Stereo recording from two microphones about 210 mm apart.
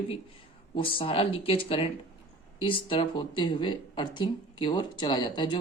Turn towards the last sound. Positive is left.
turn(degrees=20)  # may be behind; listen again after turning